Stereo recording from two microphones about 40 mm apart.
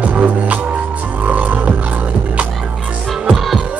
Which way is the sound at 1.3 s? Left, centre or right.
Right.